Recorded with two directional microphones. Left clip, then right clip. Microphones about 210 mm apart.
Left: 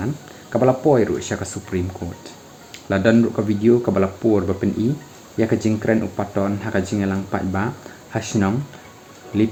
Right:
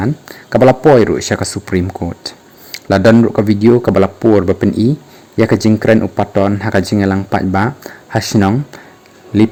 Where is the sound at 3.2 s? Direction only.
40° right (ahead or behind).